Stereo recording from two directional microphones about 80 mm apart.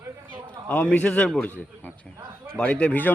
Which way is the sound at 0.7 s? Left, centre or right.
Centre.